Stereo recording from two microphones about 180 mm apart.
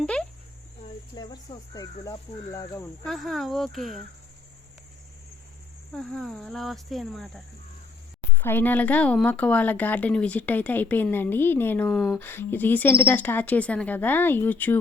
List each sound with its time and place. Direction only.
0.0 s cricket: 5° left (ahead or behind)
1.1 s speech: 25° left (ahead or behind)
3.1 s speech: centre (ahead or behind)
5.9 s speech: centre (ahead or behind)